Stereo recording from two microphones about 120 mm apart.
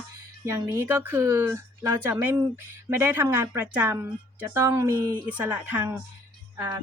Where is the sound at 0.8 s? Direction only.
20° right (ahead or behind).